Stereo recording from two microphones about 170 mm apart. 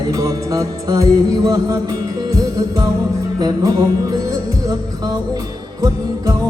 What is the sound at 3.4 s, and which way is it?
Music, 25° right (ahead or behind).